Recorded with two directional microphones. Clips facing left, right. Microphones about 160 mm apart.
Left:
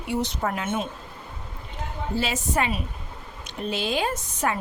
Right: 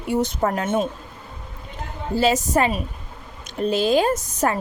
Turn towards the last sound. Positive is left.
turn(degrees=-40)  # may be behind; listen again after turning